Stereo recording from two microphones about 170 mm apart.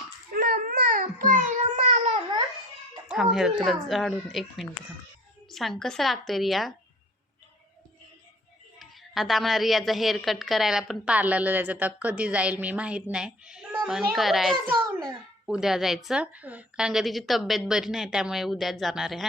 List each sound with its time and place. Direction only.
0.3 s babbling: 55° right (ahead or behind)
3.1 s a woman's voice: 5° right (ahead or behind)
8.8 s a woman's voice: centre (ahead or behind)